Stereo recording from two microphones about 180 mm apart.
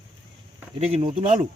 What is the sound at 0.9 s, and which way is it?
Speech, 35° right (ahead or behind).